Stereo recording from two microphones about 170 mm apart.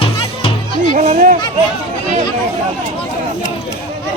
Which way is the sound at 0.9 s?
45° right (ahead or behind).